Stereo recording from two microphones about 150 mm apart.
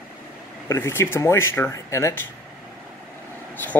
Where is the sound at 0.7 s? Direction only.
15° left (ahead or behind).